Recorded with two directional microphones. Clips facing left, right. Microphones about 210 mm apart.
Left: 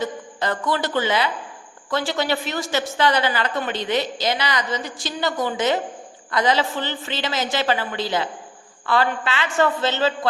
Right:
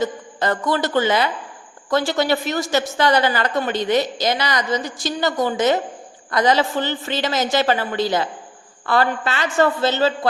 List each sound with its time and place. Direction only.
0.0 s a woman's voice: 45° right (ahead or behind)